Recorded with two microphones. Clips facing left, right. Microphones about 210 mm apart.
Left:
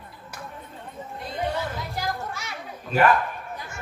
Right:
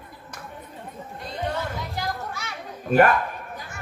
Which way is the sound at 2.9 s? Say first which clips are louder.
Right 3 dB; 50° right (ahead or behind).